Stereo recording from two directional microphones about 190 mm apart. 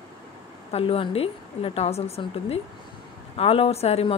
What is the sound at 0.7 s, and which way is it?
A woman's voice, 30° left (ahead or behind).